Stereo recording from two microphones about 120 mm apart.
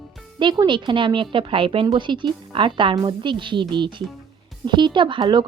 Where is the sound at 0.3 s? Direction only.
40° right (ahead or behind).